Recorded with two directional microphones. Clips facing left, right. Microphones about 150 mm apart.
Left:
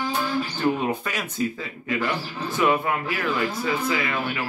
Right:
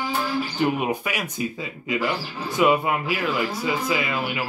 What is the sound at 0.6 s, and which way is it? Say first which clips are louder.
Speech: right 1 dB; 15° right (ahead or behind).